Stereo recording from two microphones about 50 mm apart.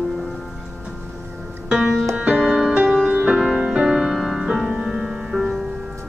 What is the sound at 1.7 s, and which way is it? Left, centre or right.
Music, centre.